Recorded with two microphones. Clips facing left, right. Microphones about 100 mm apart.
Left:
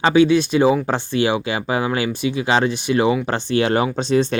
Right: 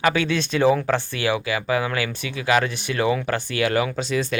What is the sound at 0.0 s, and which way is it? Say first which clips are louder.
Speech: left 7 dB; 20° left (ahead or behind).